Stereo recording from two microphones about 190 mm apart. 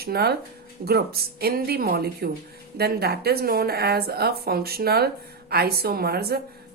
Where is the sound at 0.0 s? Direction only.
55° right (ahead or behind).